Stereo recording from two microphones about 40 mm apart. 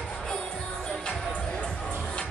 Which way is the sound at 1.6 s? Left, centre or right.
Left.